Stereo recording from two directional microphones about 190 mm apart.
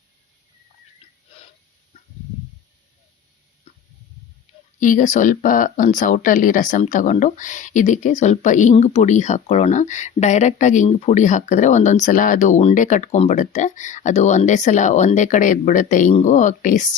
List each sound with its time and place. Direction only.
4.8 s speech: 45° left (ahead or behind)